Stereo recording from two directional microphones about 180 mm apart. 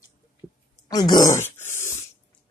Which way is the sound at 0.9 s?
20° left (ahead or behind).